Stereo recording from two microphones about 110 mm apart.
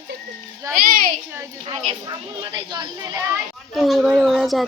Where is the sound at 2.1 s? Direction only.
45° right (ahead or behind).